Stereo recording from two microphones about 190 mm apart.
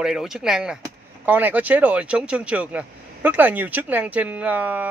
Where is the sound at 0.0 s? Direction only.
5° right (ahead or behind).